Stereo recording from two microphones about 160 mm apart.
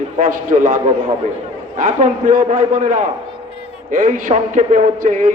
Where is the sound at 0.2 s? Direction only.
55° right (ahead or behind).